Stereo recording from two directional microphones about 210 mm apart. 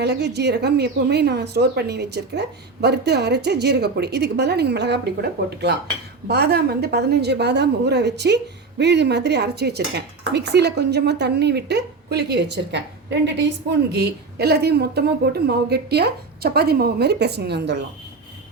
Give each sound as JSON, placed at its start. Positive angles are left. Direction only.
{"t": 0.0, "sound": "speech", "side_deg": -55}